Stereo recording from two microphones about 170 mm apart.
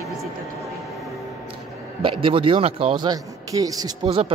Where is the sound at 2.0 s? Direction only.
30° right (ahead or behind).